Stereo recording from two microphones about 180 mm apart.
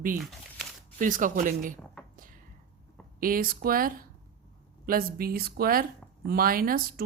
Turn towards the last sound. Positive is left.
turn(degrees=-55)  # may be behind; listen again after turning